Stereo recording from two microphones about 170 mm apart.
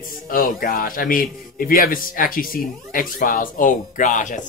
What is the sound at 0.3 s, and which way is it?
A man's voice, 55° left (ahead or behind).